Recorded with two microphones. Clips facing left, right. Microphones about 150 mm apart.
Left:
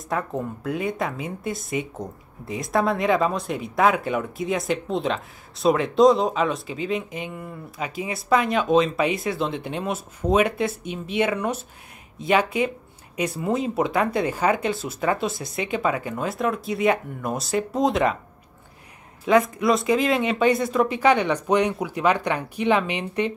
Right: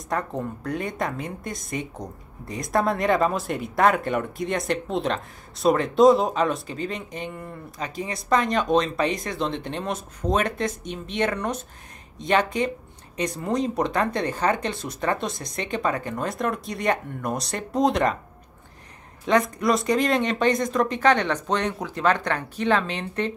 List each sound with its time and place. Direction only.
0.1 s a woman's voice: 5° left (ahead or behind)
19.2 s speech: 5° left (ahead or behind)